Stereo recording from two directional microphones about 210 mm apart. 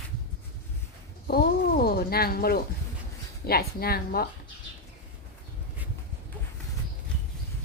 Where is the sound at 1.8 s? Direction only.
45° left (ahead or behind).